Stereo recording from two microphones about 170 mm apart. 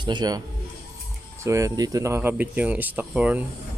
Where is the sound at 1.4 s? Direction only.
20° right (ahead or behind).